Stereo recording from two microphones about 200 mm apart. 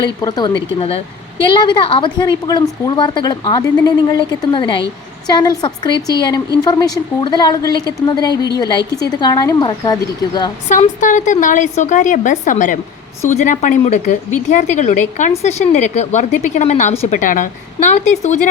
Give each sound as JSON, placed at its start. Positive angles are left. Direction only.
{"t": 0.0, "sound": "a woman's voice", "side_deg": 20}
{"t": 10.7, "sound": "speech", "side_deg": 40}